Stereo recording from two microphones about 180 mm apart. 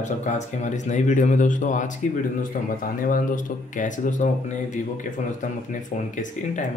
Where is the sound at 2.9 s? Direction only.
50° left (ahead or behind).